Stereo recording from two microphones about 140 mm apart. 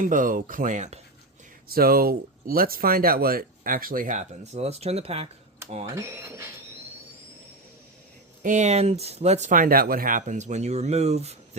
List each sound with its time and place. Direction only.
0.0 s speech: 70° right (ahead or behind)
1.7 s speech: 90° right; by 5.3 s 45° right (ahead or behind)
5.8 s speech: 20° right (ahead or behind)
8.4 s speech: 55° right (ahead or behind)
9.5 s speech: 80° right; by 11.3 s 50° right (ahead or behind)